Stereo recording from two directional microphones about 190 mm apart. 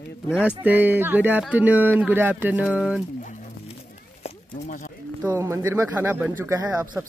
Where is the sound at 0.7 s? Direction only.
10° right (ahead or behind).